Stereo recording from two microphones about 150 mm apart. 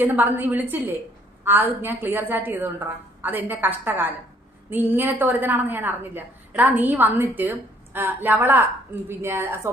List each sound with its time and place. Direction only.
0.0 s a woman's voice: 10° right (ahead or behind)